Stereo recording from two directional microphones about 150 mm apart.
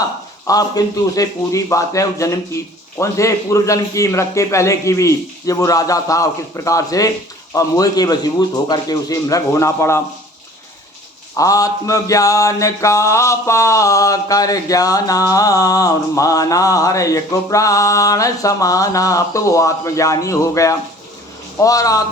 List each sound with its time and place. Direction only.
0.4 s mantra: 25° left (ahead or behind)
11.3 s mantra: 25° left (ahead or behind)